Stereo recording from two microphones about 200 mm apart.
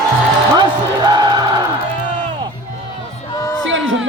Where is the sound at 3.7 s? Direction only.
75° right (ahead or behind).